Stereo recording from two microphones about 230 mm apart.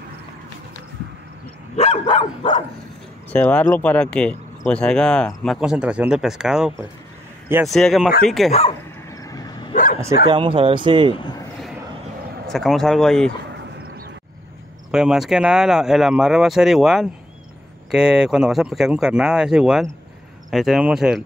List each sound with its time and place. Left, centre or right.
1.8 s dog: left
3.3 s speech: centre
8.5 s dog: left
9.1 s vehicle: centre
10.2 s speech: right
12.4 s speech: centre
14.9 s speech: centre